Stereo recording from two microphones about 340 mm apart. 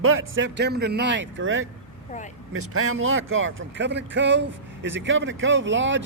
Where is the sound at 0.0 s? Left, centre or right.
Right.